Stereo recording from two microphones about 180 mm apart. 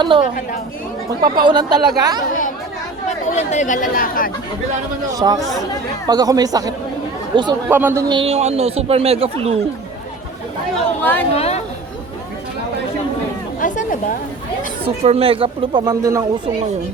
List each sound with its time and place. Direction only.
0.0 s speech: 25° right (ahead or behind)
1.5 s speech: 25° right (ahead or behind)
3.3 s speech: 40° left (ahead or behind)
5.2 s speech: 25° right (ahead or behind)
7.7 s speech: 10° right (ahead or behind)
8.0 s speech: 30° right (ahead or behind)
11.0 s speech: 10° left (ahead or behind)
11.3 s speech: 35° left (ahead or behind)
13.6 s chatter: 45° left (ahead or behind)
15.0 s speech: 35° right (ahead or behind)